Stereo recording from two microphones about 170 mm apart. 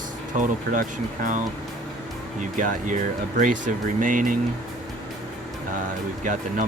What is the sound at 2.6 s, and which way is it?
Speech, 50° right (ahead or behind).